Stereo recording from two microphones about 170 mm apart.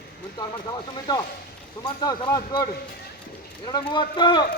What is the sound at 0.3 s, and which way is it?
Speech, 25° left (ahead or behind).